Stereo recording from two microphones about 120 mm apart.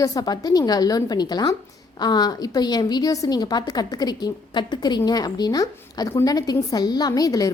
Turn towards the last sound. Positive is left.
turn(degrees=30)  # may be behind; listen again after turning